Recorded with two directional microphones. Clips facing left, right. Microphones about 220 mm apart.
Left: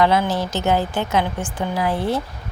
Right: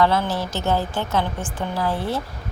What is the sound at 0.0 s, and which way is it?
Speech, 15° left (ahead or behind).